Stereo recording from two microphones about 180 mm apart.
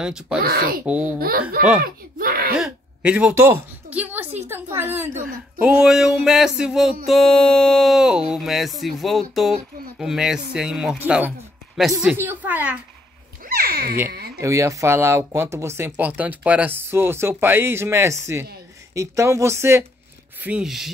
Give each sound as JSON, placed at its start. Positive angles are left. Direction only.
{"t": 0.0, "sound": "speech", "side_deg": -5}
{"t": 0.4, "sound": "speech", "side_deg": -55}
{"t": 2.5, "sound": "a sound", "side_deg": -5}
{"t": 4.7, "sound": "speech", "side_deg": -15}
{"t": 13.5, "sound": "a sound", "side_deg": -60}
{"t": 14.4, "sound": "speech", "side_deg": -15}
{"t": 20.4, "sound": "speech", "side_deg": -5}